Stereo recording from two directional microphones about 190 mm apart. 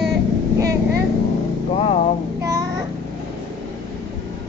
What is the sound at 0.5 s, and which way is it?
Vehicle, 15° right (ahead or behind).